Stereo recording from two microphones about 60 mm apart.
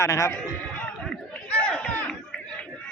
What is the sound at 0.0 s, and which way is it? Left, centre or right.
Speech, left.